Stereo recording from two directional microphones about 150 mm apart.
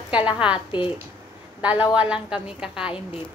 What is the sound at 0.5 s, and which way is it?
Speech, 35° left (ahead or behind).